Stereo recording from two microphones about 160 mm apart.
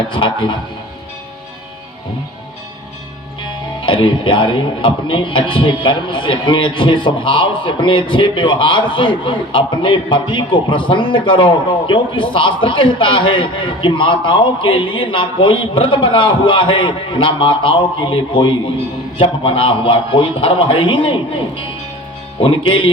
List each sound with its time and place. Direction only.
0.1 s speech: 30° left (ahead or behind)
3.8 s speech: 30° left (ahead or behind)